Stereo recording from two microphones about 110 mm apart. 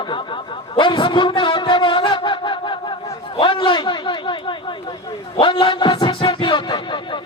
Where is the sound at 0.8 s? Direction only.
50° left (ahead or behind).